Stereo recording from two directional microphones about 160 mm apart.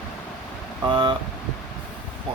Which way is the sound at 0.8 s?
30° right (ahead or behind).